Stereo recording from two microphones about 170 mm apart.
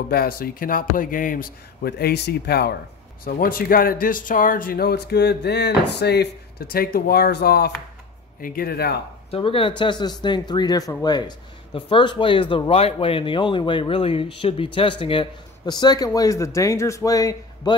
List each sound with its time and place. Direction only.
0.1 s speech: 60° left (ahead or behind)
3.3 s speech: 55° left (ahead or behind)
8.4 s speech: 55° left (ahead or behind)
9.3 s speech: 30° left (ahead or behind)